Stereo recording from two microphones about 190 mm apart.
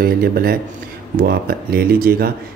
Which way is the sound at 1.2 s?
55° right (ahead or behind).